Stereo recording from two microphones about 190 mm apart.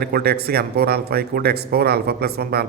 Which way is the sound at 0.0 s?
55° right (ahead or behind).